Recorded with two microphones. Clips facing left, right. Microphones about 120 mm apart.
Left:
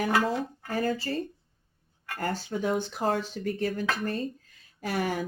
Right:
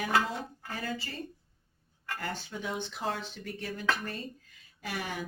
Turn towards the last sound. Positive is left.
turn(degrees=40)  # may be behind; listen again after turning